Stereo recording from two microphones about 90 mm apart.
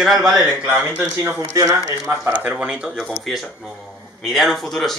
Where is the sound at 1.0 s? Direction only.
30° right (ahead or behind).